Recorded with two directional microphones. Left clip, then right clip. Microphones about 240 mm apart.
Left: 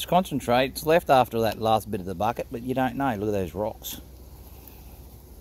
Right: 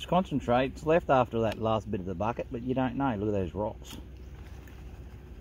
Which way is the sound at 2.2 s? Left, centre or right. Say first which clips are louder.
Left 6 dB; left.